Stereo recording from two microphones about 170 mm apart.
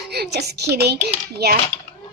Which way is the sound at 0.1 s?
75° right (ahead or behind).